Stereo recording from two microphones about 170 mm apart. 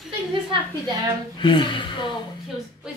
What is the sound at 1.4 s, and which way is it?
Speech, 30° left (ahead or behind).